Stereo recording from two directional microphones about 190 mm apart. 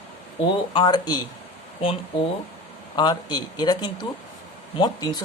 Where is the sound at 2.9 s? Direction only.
20° left (ahead or behind).